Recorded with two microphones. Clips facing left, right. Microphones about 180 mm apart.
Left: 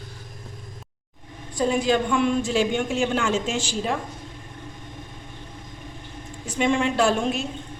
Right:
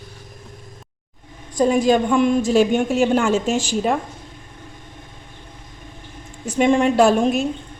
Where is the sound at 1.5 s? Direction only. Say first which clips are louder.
Right 5 dB; 45° right (ahead or behind).